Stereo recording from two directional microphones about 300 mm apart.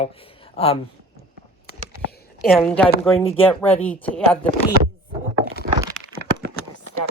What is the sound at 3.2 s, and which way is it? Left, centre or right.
Speech, centre.